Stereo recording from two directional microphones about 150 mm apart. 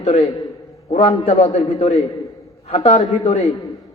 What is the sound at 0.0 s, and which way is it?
A man's voice, 45° left (ahead or behind).